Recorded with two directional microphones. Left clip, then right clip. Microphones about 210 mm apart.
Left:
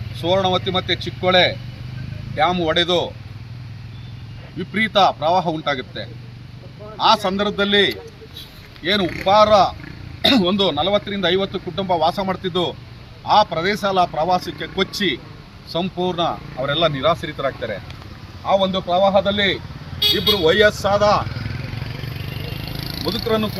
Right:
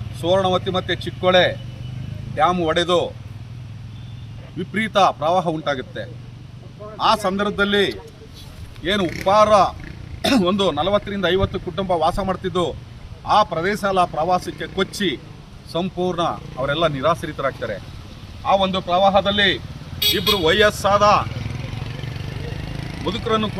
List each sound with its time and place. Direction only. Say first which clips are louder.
0.2 s speech: even; 15° right (ahead or behind)
4.7 s speech: left 1 dB; 15° right (ahead or behind)
22.5 s vehicle: left 4 dB; 30° right (ahead or behind)
23.0 s speech: even; 15° right (ahead or behind)